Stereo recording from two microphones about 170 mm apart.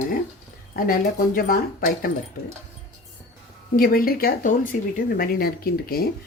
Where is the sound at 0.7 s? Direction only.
55° left (ahead or behind).